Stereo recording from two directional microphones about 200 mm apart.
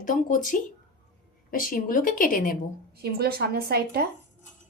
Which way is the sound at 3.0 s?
50° right (ahead or behind).